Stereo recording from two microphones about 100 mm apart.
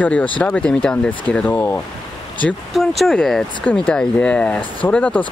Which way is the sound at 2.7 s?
Centre (ahead or behind).